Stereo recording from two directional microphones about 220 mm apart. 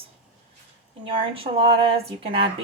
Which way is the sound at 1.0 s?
25° right (ahead or behind).